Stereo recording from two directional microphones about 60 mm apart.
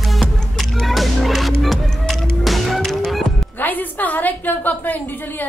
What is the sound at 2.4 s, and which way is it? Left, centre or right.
Fowl, centre.